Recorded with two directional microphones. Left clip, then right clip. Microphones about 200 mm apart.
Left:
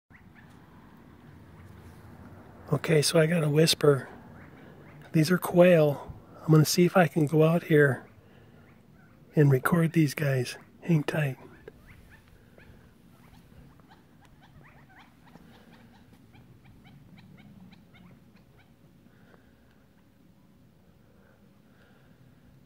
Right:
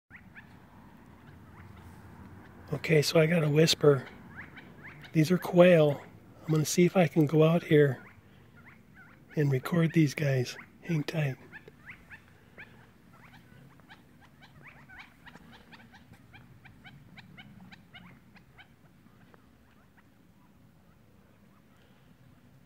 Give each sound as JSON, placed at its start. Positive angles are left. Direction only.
{"t": 2.6, "sound": "speech", "side_deg": 20}
{"t": 5.1, "sound": "speech", "side_deg": 25}
{"t": 9.3, "sound": "speech", "side_deg": 20}
{"t": 14.4, "sound": "rodents", "side_deg": 5}
{"t": 16.6, "sound": "wild animals", "side_deg": 5}